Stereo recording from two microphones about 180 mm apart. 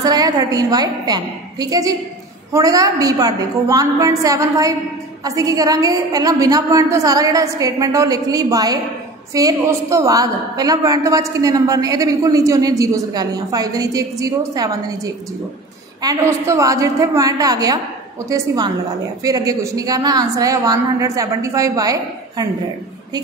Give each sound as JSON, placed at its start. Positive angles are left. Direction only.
{"t": 0.0, "sound": "a woman's voice", "side_deg": -20}